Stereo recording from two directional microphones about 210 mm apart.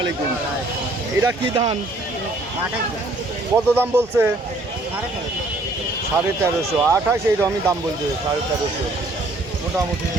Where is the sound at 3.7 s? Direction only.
10° right (ahead or behind).